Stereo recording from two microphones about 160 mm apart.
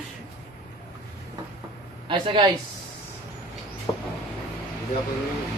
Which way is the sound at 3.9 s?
20° left (ahead or behind).